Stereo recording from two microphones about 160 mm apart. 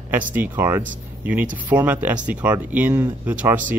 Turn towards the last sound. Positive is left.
turn(degrees=-10)  # may be behind; listen again after turning